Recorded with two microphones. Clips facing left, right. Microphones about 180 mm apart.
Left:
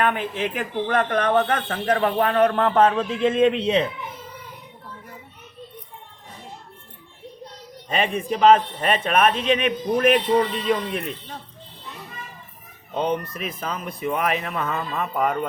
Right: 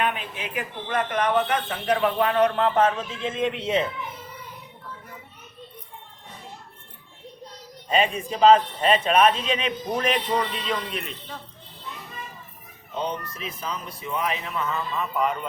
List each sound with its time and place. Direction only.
0.0 s a man's voice: 50° left (ahead or behind); by 3.8 s 70° left (ahead or behind)
7.9 s speech: 55° left (ahead or behind)
13.0 s speech: 55° left (ahead or behind)